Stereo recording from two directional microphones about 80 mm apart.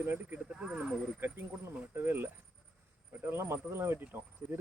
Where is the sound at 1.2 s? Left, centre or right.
Right.